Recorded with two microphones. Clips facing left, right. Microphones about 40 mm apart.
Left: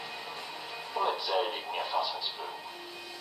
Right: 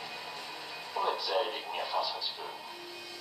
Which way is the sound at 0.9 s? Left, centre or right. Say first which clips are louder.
Left 1 dB; centre.